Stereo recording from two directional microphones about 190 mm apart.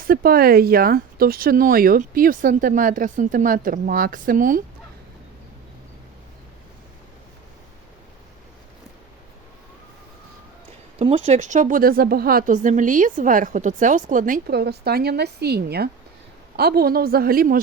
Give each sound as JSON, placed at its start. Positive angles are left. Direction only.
{"t": 0.0, "sound": "speech", "side_deg": -50}
{"t": 11.0, "sound": "speech", "side_deg": -35}